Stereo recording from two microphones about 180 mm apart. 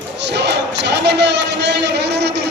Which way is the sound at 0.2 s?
70° right (ahead or behind).